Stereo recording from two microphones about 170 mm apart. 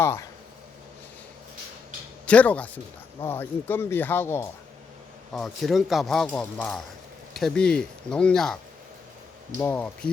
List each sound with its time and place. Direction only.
0.0 s speech: 15° left (ahead or behind)
2.2 s speech: 10° left (ahead or behind)
5.3 s speech: centre (ahead or behind)
9.6 s speech: 10° left (ahead or behind)